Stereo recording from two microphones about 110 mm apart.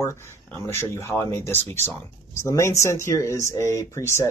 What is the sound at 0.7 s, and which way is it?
Speech, 25° left (ahead or behind).